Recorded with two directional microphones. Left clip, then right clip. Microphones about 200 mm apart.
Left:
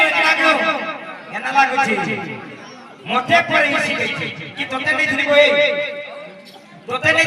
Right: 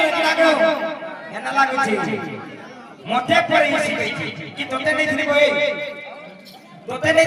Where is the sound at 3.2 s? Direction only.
40° right (ahead or behind).